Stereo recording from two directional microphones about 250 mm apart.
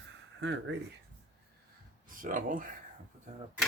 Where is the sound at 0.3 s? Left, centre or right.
Right.